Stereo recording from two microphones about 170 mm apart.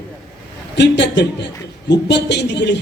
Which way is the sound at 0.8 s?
90° left.